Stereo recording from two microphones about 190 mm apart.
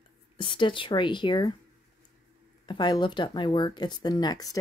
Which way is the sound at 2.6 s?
25° left (ahead or behind).